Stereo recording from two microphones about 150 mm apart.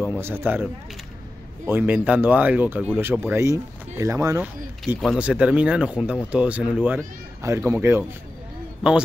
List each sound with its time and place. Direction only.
0.0 s speech: 10° right (ahead or behind)
1.7 s speech: 10° right (ahead or behind)
4.4 s speech: centre (ahead or behind)
7.4 s speech: 20° right (ahead or behind)